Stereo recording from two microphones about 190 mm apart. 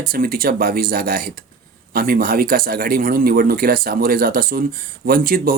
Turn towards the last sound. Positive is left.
turn(degrees=-50)  # may be behind; listen again after turning